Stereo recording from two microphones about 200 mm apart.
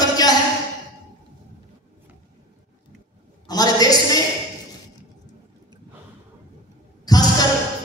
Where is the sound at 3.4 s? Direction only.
20° left (ahead or behind).